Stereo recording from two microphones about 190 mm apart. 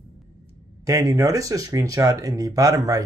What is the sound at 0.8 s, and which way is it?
Speech, 15° right (ahead or behind).